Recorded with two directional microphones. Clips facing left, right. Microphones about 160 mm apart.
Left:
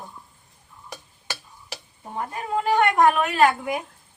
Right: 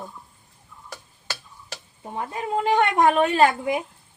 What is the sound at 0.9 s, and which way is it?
Tick-tock, 15° left (ahead or behind).